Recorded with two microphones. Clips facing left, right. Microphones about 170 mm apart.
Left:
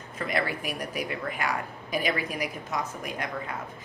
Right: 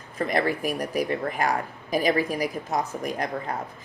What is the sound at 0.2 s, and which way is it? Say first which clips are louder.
Speech: right 5 dB; 40° right (ahead or behind).